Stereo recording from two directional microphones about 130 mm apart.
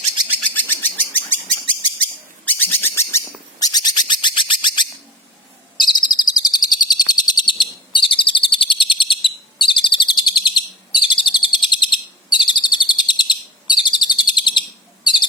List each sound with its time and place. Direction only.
0.4 s bird: 15° left (ahead or behind); by 4.9 s 35° left (ahead or behind)
5.7 s bird vocalization: 35° left (ahead or behind)